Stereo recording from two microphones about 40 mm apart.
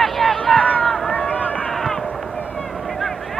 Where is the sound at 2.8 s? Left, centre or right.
Centre.